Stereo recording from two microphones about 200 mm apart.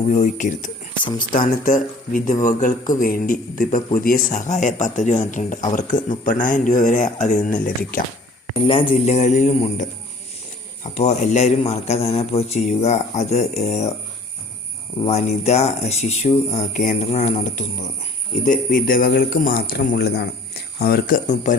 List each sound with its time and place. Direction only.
0.1 s speech: 40° left (ahead or behind)
8.6 s speech: 25° left (ahead or behind)
10.9 s speech: 35° left (ahead or behind)
15.0 s speech: 35° left (ahead or behind); by 21.2 s 50° left (ahead or behind)